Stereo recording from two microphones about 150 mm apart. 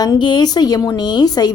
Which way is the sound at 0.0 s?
30° left (ahead or behind).